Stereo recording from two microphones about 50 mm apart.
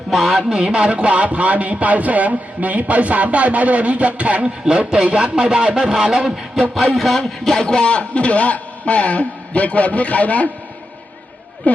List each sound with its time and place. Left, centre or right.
0.1 s speech: centre
0.5 s a man's voice: centre
6.9 s speech: centre
7.2 s a man's voice: centre; by 10.5 s left
11.6 s speech: left